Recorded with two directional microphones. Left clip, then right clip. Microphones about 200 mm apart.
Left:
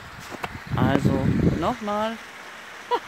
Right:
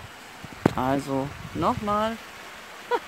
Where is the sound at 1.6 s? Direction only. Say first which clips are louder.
Right 1 dB; centre (ahead or behind).